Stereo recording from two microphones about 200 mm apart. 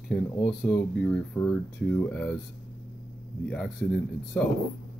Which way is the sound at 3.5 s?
5° left (ahead or behind).